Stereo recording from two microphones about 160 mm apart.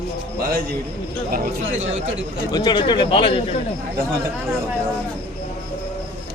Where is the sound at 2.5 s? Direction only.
25° left (ahead or behind).